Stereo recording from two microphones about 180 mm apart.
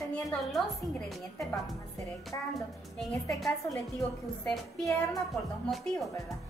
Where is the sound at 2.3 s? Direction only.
15° left (ahead or behind).